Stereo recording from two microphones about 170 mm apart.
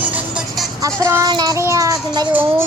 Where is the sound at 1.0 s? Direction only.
15° right (ahead or behind).